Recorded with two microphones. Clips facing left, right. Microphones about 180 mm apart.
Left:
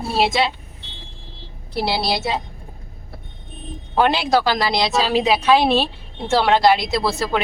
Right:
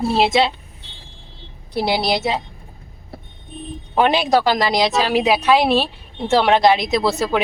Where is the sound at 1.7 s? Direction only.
15° right (ahead or behind).